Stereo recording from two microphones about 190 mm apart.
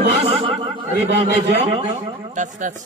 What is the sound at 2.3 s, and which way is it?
Speech, 40° right (ahead or behind).